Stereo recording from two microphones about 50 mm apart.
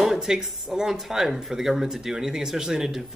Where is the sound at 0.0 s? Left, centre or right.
Centre.